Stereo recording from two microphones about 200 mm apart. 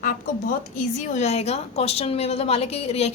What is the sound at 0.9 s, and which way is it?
A woman's voice, 35° left (ahead or behind).